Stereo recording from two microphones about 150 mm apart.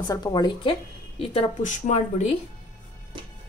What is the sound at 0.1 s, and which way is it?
Speech, 30° left (ahead or behind).